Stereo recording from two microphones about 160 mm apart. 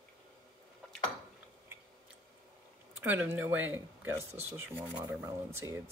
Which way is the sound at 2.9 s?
10° right (ahead or behind).